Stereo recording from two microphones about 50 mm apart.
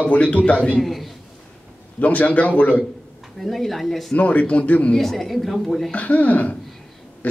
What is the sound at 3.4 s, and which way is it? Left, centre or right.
Speech, centre.